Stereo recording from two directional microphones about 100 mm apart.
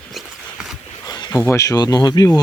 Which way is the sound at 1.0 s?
40° left (ahead or behind).